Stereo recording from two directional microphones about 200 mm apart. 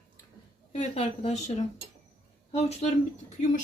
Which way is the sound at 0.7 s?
30° left (ahead or behind).